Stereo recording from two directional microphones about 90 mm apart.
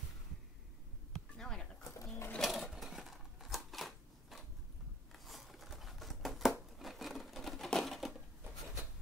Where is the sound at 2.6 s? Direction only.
5° right (ahead or behind).